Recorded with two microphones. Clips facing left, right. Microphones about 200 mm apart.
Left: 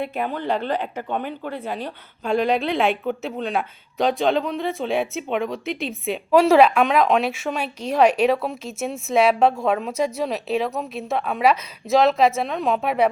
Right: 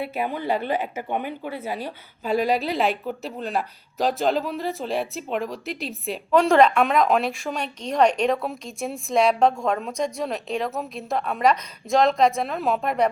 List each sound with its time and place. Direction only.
0.0 s a woman's voice: 5° right (ahead or behind)